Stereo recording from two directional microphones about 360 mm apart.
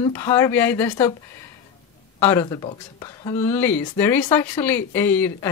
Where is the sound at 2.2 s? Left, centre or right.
Centre.